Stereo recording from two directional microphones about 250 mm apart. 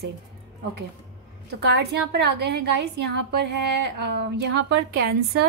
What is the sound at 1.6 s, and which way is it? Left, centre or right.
A woman's voice, right.